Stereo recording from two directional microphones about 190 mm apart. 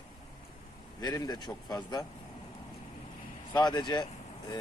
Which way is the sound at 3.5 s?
20° left (ahead or behind).